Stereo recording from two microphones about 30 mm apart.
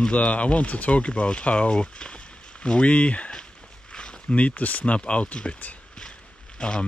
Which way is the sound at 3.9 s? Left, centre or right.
Left.